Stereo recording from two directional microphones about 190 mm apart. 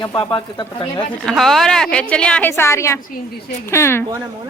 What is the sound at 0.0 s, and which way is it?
Speech, 20° left (ahead or behind).